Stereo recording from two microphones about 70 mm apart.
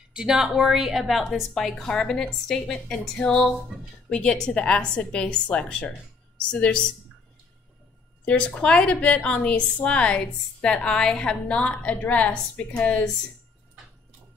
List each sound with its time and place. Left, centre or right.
0.1 s a woman's voice: centre
8.3 s a woman's voice: centre